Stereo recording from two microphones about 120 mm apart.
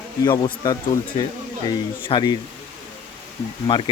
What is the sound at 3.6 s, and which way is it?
Speech, 40° left (ahead or behind).